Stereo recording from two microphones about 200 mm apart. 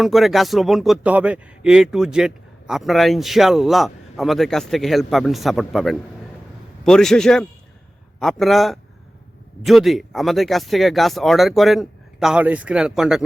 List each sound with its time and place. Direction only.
0.0 s speech: centre (ahead or behind)